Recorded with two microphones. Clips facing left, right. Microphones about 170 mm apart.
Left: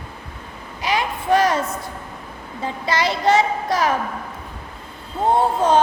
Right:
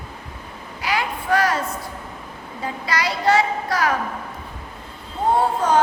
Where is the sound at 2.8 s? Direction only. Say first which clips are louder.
Left 2 dB; 25° left (ahead or behind).